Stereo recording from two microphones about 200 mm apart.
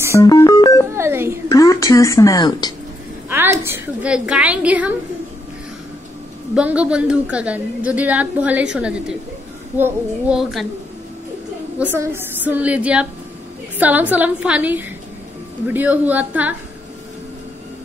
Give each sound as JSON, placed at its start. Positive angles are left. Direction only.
{"t": 0.1, "sound": "music", "side_deg": 15}
{"t": 0.9, "sound": "a sound", "side_deg": -10}
{"t": 1.5, "sound": "speech", "side_deg": 15}
{"t": 3.3, "sound": "a woman's voice", "side_deg": -10}
{"t": 6.5, "sound": "a woman's voice", "side_deg": -5}
{"t": 11.8, "sound": "a woman's voice", "side_deg": -10}